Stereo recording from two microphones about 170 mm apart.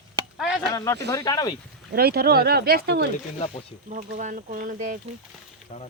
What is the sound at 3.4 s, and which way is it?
Speech, 40° left (ahead or behind).